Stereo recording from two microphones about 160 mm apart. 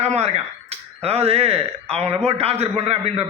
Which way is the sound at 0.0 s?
45° right (ahead or behind).